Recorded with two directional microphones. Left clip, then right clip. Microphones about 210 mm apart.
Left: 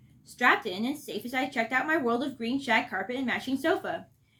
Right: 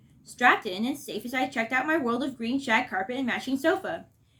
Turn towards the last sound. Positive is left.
turn(degrees=-20)  # may be behind; listen again after turning